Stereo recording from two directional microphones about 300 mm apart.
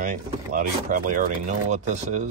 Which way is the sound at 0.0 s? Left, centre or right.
Right.